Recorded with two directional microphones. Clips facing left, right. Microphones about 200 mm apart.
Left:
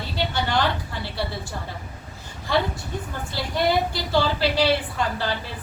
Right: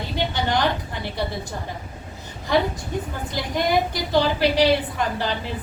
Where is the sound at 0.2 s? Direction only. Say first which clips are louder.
Right 1 dB; 20° right (ahead or behind).